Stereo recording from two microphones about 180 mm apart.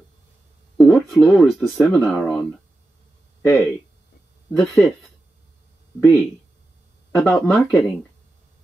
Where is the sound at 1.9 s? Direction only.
Centre (ahead or behind).